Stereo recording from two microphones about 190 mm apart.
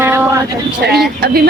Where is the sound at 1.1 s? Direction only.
55° right (ahead or behind).